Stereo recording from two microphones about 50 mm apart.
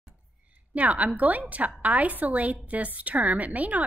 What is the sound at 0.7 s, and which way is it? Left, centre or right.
Speech, right.